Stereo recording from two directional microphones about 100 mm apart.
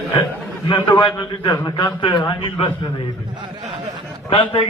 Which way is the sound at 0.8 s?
50° left (ahead or behind).